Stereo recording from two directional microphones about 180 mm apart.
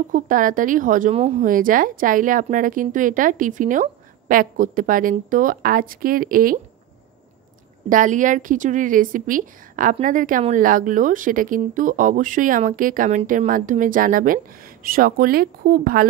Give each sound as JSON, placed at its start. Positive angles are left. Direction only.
{"t": 0.1, "sound": "a woman's voice", "side_deg": -50}
{"t": 7.9, "sound": "a woman's voice", "side_deg": -45}